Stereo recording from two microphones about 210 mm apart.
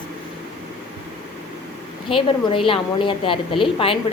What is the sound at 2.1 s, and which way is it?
A woman's voice, 25° left (ahead or behind).